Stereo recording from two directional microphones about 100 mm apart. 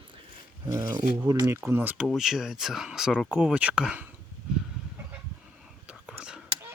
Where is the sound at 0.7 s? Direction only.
35° right (ahead or behind).